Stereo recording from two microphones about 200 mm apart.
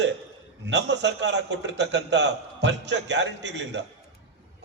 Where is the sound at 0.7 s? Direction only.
60° right (ahead or behind).